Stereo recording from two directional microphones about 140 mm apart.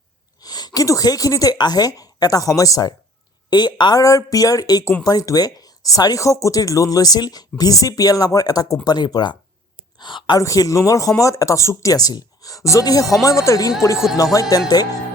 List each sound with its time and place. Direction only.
0.3 s a woman's voice: 30° left (ahead or behind)